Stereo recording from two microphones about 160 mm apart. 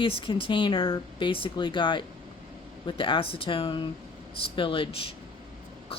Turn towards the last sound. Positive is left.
turn(degrees=35)  # may be behind; listen again after turning